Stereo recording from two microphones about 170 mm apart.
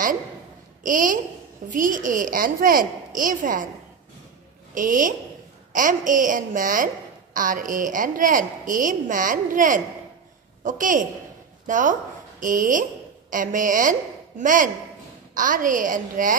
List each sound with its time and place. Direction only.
0.8 s a woman's voice: 50° right (ahead or behind)
4.7 s a woman's voice: 50° right (ahead or behind)